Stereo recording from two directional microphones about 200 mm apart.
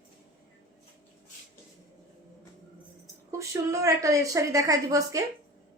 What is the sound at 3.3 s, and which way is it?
A woman's voice, 15° right (ahead or behind).